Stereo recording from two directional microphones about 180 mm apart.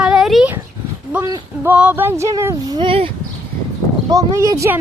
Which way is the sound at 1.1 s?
15° right (ahead or behind).